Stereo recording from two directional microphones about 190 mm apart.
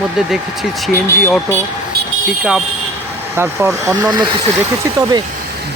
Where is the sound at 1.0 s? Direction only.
10° left (ahead or behind).